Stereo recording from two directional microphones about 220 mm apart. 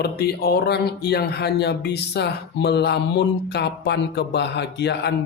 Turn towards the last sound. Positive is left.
turn(degrees=50)  # may be behind; listen again after turning